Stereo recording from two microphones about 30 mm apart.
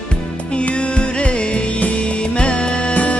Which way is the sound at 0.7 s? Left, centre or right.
Left.